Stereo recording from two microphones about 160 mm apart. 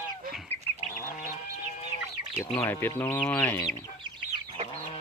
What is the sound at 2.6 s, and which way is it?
Speech, 15° left (ahead or behind).